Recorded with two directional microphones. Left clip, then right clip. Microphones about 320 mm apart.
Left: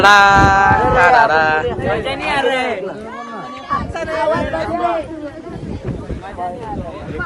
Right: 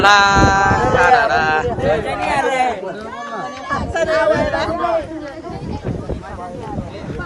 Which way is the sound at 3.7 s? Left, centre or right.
Right.